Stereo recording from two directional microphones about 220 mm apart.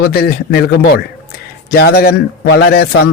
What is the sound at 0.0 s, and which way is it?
Speech, 45° left (ahead or behind).